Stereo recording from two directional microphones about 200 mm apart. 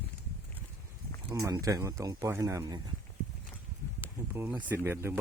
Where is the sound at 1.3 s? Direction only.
15° right (ahead or behind).